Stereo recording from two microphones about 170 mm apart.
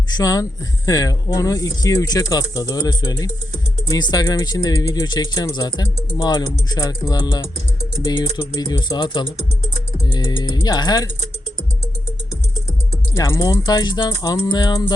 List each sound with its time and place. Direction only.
0.1 s speech: 20° left (ahead or behind)
13.1 s speech: 20° left (ahead or behind)